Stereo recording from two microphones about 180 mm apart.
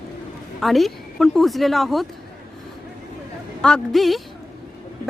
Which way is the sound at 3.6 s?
5° left (ahead or behind).